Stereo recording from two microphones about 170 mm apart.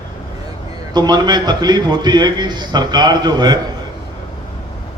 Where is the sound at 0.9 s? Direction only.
25° right (ahead or behind).